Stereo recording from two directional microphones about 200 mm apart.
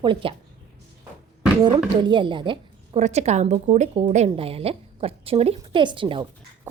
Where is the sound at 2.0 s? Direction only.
25° right (ahead or behind).